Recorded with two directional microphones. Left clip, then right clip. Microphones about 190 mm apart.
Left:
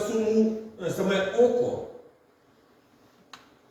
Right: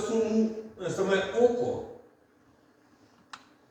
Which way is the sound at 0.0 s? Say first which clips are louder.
Left 3 dB; centre (ahead or behind).